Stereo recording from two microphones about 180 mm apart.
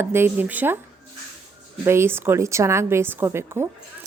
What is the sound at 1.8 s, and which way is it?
A woman's voice, 15° right (ahead or behind).